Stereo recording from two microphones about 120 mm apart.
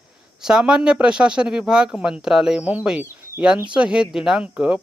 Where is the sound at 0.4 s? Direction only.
5° right (ahead or behind).